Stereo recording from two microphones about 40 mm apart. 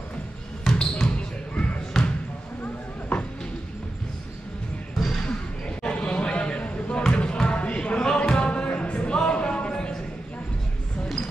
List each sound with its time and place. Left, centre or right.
0.7 s basketball bounce: left
1.5 s basketball bounce: left
2.6 s clip-clop: left
5.2 s basketball bounce: left
7.8 s a sound: left